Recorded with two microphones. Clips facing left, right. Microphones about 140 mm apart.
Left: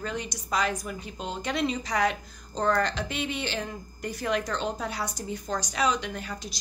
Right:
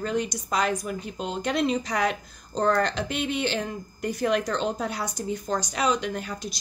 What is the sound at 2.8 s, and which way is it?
A woman's voice, 55° right (ahead or behind).